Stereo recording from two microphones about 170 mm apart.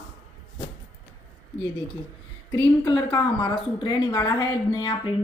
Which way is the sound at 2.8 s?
25° left (ahead or behind).